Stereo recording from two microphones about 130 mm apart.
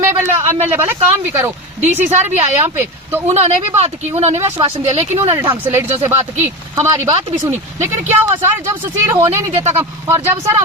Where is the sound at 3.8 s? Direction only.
55° right (ahead or behind).